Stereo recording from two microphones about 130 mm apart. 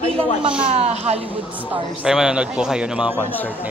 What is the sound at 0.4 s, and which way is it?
Speech, 10° right (ahead or behind).